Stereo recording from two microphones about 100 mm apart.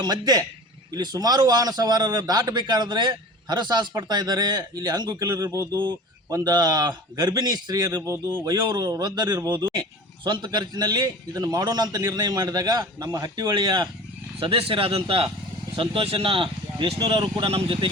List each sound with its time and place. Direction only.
0.0 s a man's voice: 45° right (ahead or behind)
14.3 s a man's voice: 70° right (ahead or behind); by 17.1 s 55° right (ahead or behind)
17.4 s speech: 65° right (ahead or behind)